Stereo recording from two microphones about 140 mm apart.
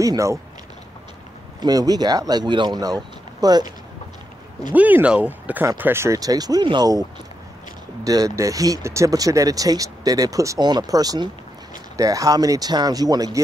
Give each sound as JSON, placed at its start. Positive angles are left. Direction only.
{"t": 0.0, "sound": "speech", "side_deg": -25}
{"t": 1.6, "sound": "speech", "side_deg": -30}
{"t": 4.7, "sound": "speech", "side_deg": -10}